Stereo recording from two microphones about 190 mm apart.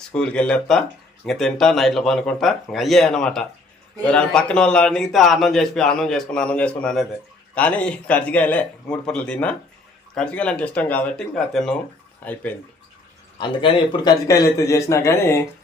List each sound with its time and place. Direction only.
0.1 s a man's voice: 5° left (ahead or behind)
13.4 s a man's voice: 25° left (ahead or behind)